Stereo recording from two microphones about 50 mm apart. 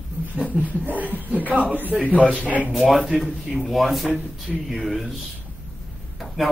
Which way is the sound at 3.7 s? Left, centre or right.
Centre.